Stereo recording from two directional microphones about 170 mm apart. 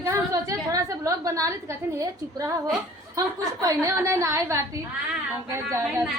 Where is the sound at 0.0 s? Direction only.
20° right (ahead or behind).